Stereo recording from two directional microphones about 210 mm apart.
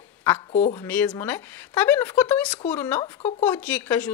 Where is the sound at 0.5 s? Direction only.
30° left (ahead or behind).